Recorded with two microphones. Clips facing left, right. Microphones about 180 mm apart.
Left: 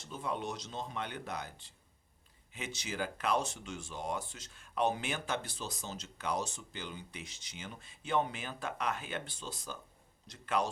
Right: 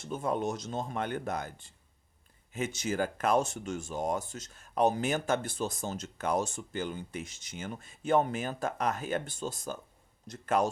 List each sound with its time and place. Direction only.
0.0 s speech: 50° right (ahead or behind)